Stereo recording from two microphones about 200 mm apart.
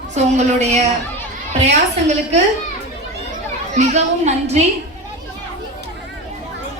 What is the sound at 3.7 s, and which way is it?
Speech, 35° right (ahead or behind).